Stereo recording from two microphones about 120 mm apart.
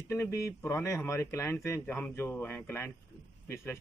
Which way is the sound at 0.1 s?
25° left (ahead or behind).